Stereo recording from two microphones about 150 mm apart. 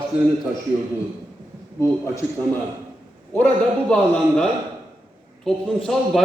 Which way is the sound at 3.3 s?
10° left (ahead or behind).